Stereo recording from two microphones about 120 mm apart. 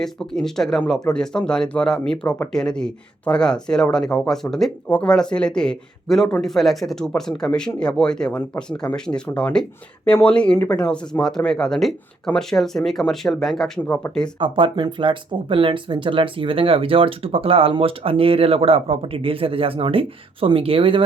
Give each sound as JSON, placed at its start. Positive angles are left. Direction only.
{"t": 0.0, "sound": "speech", "side_deg": 5}
{"t": 13.8, "sound": "speech", "side_deg": 15}
{"t": 14.3, "sound": "speech", "side_deg": -45}